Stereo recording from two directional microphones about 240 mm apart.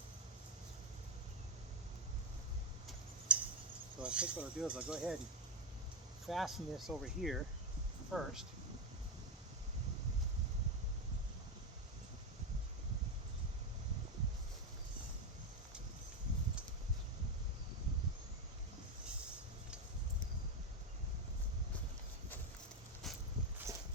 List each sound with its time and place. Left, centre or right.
3.3 s a sound: centre
4.0 s speech: centre
6.2 s speech: centre
23.0 s dog: centre